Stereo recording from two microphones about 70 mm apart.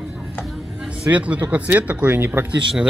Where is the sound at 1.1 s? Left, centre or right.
Centre.